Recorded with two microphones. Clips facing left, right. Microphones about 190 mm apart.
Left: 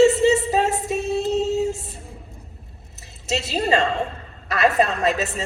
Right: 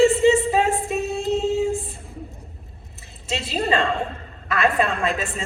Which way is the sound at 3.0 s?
40° left (ahead or behind).